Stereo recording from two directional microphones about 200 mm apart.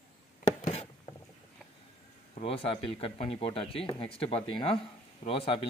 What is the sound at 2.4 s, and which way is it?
A man's voice, 30° left (ahead or behind).